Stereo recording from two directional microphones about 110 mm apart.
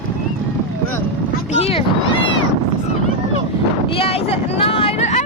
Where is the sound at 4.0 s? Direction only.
60° left (ahead or behind).